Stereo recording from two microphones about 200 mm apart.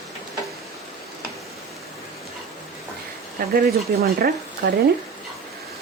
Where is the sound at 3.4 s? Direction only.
45° right (ahead or behind).